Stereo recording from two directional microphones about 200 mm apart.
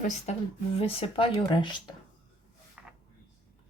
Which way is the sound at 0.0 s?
30° left (ahead or behind).